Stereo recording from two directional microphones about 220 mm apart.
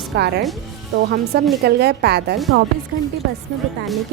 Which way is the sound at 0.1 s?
50° right (ahead or behind).